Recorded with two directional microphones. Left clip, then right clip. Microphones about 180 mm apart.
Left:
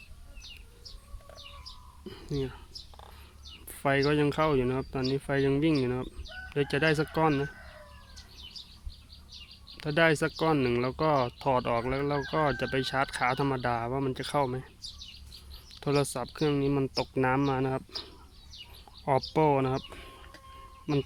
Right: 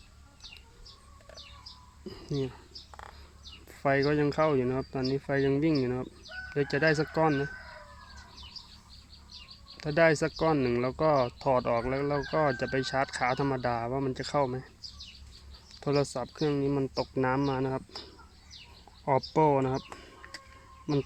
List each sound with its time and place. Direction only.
2.0 s speech: 25° right (ahead or behind)
3.7 s speech: centre (ahead or behind)
9.7 s speech: 5° right (ahead or behind)
15.8 s speech: centre (ahead or behind)
19.0 s speech: centre (ahead or behind)